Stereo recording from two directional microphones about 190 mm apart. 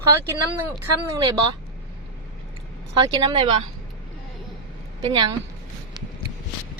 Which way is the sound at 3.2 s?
25° right (ahead or behind).